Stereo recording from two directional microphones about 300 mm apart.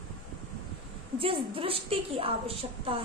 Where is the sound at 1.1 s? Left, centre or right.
Centre.